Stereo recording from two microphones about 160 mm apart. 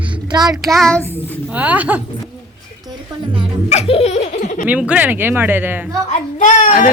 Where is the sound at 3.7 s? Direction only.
40° left (ahead or behind).